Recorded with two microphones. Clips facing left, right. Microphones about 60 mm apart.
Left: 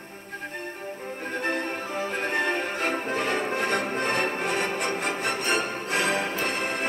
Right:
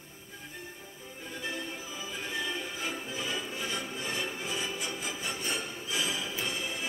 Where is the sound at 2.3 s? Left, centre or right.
Left.